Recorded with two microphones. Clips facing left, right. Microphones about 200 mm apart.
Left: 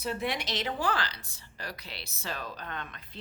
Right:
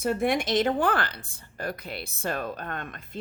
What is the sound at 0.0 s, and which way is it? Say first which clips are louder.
A woman's voice: right 8 dB; 50° right (ahead or behind).